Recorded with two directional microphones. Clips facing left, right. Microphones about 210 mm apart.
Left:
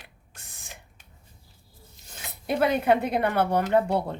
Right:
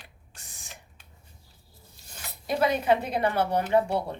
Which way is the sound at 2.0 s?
20° left (ahead or behind).